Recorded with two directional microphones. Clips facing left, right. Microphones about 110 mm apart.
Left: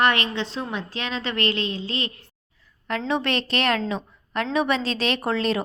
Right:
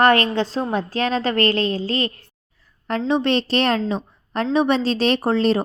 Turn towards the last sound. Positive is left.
turn(degrees=-35)  # may be behind; listen again after turning